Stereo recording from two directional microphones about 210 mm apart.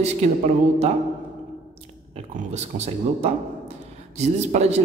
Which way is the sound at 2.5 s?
30° right (ahead or behind).